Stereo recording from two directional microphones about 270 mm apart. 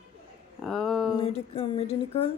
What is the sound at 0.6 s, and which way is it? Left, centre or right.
Speech, centre.